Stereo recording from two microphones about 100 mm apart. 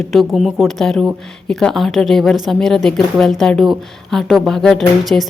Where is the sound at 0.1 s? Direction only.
Centre (ahead or behind).